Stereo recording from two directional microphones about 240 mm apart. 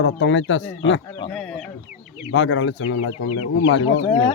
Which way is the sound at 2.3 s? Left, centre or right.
Left.